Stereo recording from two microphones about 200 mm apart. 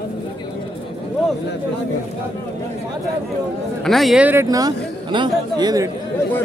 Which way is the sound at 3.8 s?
Centre (ahead or behind).